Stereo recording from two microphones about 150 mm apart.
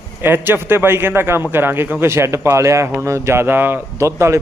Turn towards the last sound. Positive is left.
turn(degrees=-20)  # may be behind; listen again after turning